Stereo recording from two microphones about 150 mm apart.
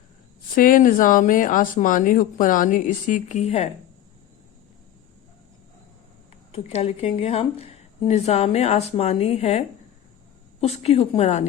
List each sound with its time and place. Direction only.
0.5 s speech: 65° left (ahead or behind); by 3.7 s 45° left (ahead or behind)
6.5 s a woman's voice: 45° left (ahead or behind)